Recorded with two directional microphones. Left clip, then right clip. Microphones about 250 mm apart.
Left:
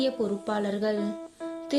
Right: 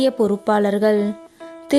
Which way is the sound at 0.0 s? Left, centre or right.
Right.